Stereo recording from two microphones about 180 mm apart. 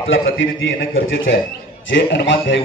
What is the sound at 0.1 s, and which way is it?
A man's voice, 90° left.